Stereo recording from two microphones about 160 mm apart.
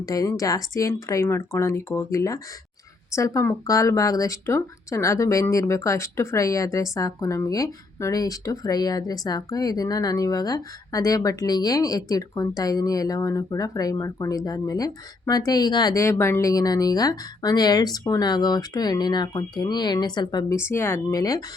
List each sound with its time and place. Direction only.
0.0 s speech: 20° left (ahead or behind)
20.7 s speech: 15° left (ahead or behind)